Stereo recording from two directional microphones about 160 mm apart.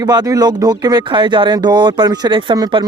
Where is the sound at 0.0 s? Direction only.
25° right (ahead or behind).